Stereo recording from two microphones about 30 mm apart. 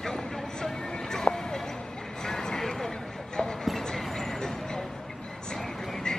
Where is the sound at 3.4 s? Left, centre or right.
Centre.